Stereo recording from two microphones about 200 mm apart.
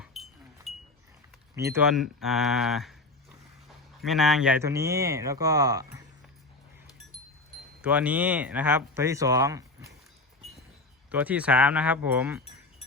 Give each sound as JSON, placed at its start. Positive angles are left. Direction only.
{"t": 0.0, "sound": "wind chime", "side_deg": 0}
{"t": 1.5, "sound": "speech", "side_deg": -15}
{"t": 1.9, "sound": "speech", "side_deg": 0}
{"t": 4.0, "sound": "speech", "side_deg": 0}
{"t": 7.8, "sound": "speech", "side_deg": -5}
{"t": 11.1, "sound": "speech", "side_deg": -10}